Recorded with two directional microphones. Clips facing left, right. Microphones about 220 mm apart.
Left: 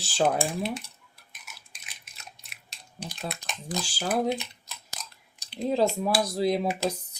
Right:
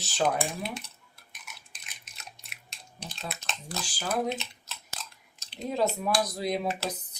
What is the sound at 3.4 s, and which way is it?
Speech, 15° left (ahead or behind).